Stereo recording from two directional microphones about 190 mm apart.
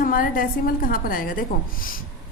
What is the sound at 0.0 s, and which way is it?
A woman's voice, 45° left (ahead or behind).